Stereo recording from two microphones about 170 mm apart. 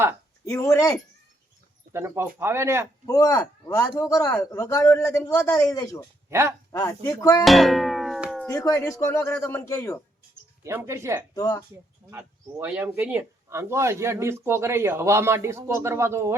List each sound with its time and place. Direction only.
0.4 s a man's voice: 20° left (ahead or behind)
1.9 s speech: 15° right (ahead or behind)
3.1 s a man's voice: 20° left (ahead or behind)
7.4 s music: centre (ahead or behind)
8.4 s speech: 15° left (ahead or behind)
10.6 s speech: 15° right (ahead or behind)
11.3 s a man's voice: 20° left (ahead or behind)
12.1 s speech: 10° right (ahead or behind)